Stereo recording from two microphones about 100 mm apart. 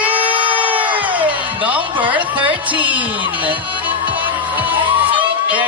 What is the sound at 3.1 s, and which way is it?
Music, 55° right (ahead or behind).